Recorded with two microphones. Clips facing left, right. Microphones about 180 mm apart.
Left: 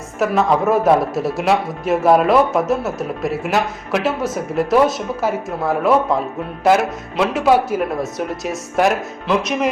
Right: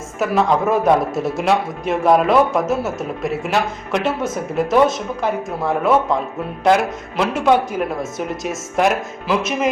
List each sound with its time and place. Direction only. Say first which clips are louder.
0.2 s a man's voice: left 1 dB; centre (ahead or behind)